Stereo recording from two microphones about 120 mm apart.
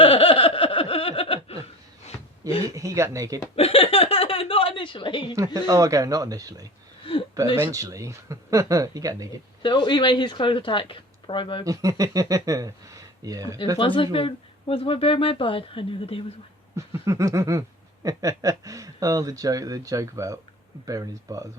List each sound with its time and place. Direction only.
0.0 s a sound: 50° left (ahead or behind)
2.6 s speech: 25° right (ahead or behind)
3.5 s a sound: 55° left (ahead or behind)
5.5 s speech: 30° right (ahead or behind)
7.0 s a sound: 50° left (ahead or behind)
7.5 s speech: 25° right (ahead or behind)
9.6 s speech: 40° left (ahead or behind)
11.6 s speech: 30° right (ahead or behind)
13.7 s speech: 45° left (ahead or behind)
16.7 s speech: 25° right (ahead or behind)